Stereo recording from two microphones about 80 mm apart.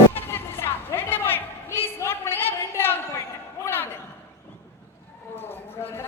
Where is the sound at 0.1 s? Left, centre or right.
Left.